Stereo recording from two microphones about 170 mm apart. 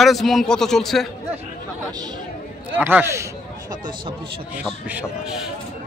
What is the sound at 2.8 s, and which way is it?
Speech, 10° right (ahead or behind).